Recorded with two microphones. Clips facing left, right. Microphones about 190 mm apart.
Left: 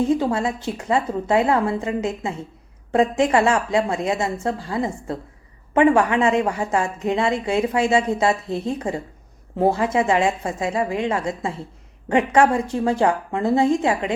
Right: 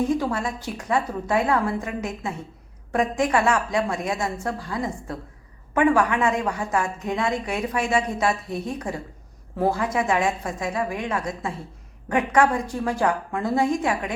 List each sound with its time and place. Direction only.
0.1 s a woman's voice: 25° left (ahead or behind)